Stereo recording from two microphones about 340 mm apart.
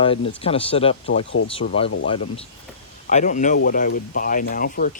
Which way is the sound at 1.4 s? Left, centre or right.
Left.